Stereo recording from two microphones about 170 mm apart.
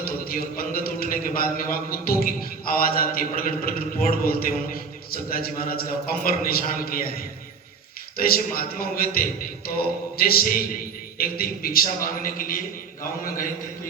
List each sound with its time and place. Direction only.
0.0 s a man's voice: 60° left (ahead or behind)
8.3 s a man's voice: 60° left (ahead or behind)